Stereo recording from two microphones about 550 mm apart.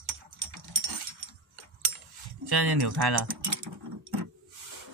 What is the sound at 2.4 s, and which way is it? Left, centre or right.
Speech, right.